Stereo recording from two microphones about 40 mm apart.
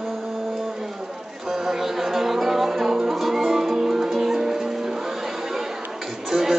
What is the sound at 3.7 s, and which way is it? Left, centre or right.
Music, centre.